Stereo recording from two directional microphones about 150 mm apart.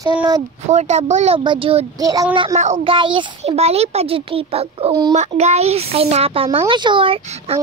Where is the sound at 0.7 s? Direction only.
50° right (ahead or behind).